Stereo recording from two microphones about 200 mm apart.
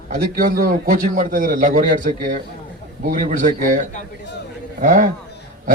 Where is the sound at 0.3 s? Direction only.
45° right (ahead or behind).